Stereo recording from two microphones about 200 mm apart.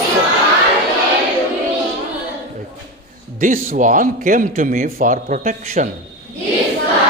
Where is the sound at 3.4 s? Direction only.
40° right (ahead or behind).